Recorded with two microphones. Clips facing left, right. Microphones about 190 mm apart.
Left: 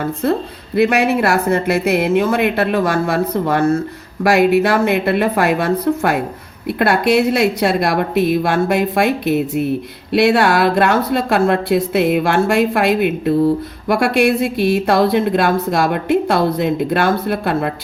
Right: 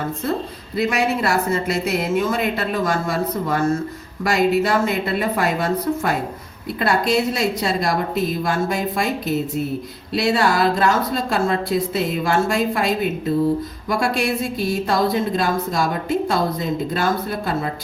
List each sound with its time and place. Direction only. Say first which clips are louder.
0.8 s a woman's voice: left 6 dB; 65° left (ahead or behind)